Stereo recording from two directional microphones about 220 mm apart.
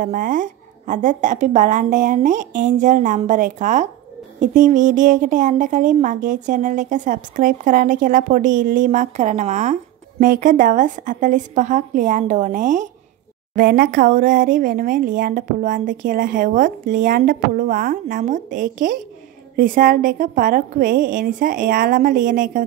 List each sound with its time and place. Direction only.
0.0 s a woman's voice: 35° right (ahead or behind)